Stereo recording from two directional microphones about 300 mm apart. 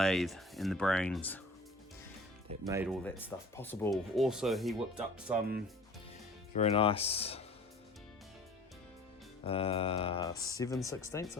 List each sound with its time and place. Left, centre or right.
0.0 s speech: centre
2.5 s speech: centre
3.0 s speech: centre
6.5 s speech: left
9.4 s speech: centre